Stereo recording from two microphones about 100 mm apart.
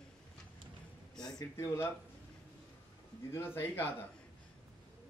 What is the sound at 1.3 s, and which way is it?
Speech, 35° left (ahead or behind).